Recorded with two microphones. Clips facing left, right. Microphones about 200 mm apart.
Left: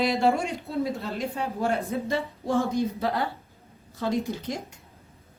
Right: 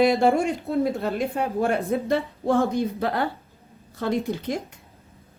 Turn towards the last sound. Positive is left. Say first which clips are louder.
# right 3 dB
turn(degrees=-60)  # may be behind; listen again after turning